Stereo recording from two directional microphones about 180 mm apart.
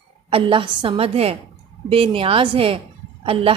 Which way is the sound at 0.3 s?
30° right (ahead or behind).